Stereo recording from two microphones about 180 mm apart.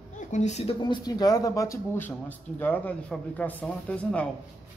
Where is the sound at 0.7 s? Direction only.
25° left (ahead or behind).